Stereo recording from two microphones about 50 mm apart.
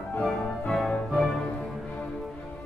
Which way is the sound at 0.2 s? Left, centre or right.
Centre.